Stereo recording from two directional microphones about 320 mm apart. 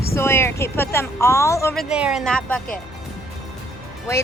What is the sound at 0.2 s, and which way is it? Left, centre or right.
Speech, centre.